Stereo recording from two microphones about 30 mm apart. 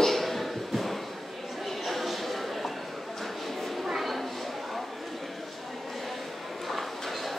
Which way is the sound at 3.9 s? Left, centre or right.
Centre.